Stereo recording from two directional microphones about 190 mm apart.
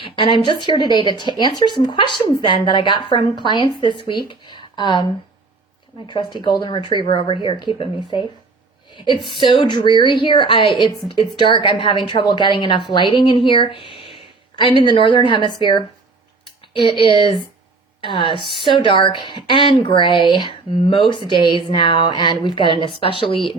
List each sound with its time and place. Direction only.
0.0 s speech: 25° left (ahead or behind)
6.1 s speech: 25° left (ahead or behind)
17.0 s speech: 25° left (ahead or behind)